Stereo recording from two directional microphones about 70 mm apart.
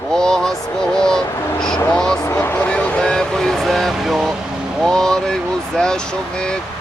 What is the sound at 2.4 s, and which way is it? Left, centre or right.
Vehicle, left.